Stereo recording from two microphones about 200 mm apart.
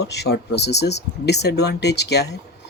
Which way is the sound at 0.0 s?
55° left (ahead or behind).